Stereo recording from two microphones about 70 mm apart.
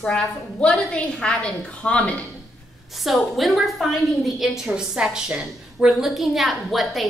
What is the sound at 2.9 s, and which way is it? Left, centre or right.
A woman's voice, centre.